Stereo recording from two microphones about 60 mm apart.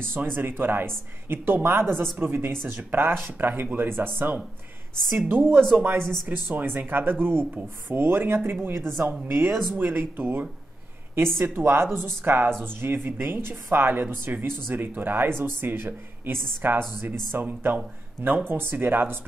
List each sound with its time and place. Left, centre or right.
0.0 s speech: right